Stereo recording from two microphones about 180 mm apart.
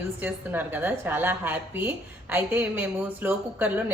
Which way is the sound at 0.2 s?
10° right (ahead or behind).